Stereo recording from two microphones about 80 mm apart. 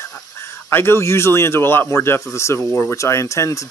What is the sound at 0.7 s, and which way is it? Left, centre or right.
Speech, left.